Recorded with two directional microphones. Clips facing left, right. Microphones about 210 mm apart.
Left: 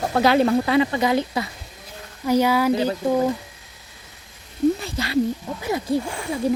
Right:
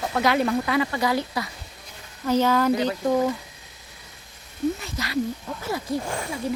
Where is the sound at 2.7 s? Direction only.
30° left (ahead or behind).